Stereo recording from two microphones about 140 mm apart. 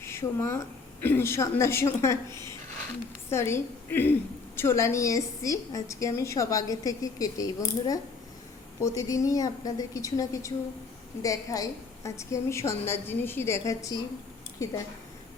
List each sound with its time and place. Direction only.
0.0 s a woman's voice: 20° left (ahead or behind)
2.3 s speech: 30° right (ahead or behind)
3.2 s a woman's voice: 20° left (ahead or behind)